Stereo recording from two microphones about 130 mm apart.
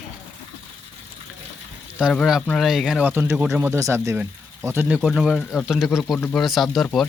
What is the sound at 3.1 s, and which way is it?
Speech, 15° right (ahead or behind).